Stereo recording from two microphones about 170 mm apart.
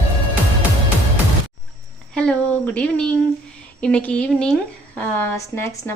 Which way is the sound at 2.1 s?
5° left (ahead or behind).